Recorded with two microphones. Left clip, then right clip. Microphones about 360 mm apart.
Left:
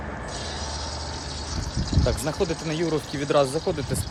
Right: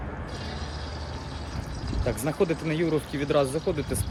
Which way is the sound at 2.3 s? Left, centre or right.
Centre.